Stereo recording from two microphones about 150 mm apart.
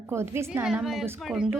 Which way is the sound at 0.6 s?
5° right (ahead or behind).